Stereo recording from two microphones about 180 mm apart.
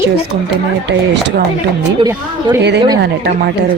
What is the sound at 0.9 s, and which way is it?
Speech, 70° right (ahead or behind).